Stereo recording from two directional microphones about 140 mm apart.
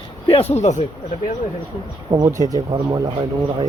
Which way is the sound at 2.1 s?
25° right (ahead or behind).